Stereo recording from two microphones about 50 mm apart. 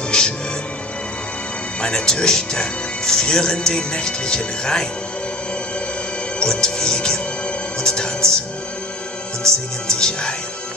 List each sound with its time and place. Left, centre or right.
0.1 s music: centre
1.8 s speech: centre
6.4 s speech: centre
7.8 s music: centre
9.8 s speech: centre